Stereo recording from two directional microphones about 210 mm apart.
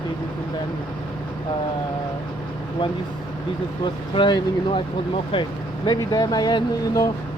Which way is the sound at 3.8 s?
20° left (ahead or behind).